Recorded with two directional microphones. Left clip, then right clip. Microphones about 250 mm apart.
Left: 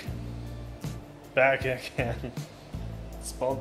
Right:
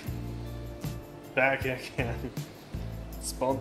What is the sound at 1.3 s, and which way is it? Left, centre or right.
Speech, left.